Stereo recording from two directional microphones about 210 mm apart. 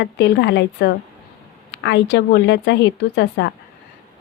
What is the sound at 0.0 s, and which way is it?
A woman's voice, 55° left (ahead or behind).